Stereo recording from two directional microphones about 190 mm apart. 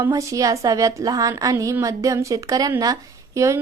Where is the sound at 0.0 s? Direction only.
15° right (ahead or behind).